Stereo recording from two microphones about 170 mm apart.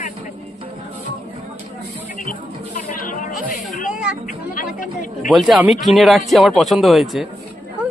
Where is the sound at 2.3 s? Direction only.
55° left (ahead or behind).